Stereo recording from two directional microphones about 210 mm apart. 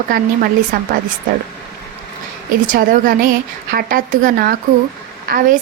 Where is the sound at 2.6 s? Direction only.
40° right (ahead or behind).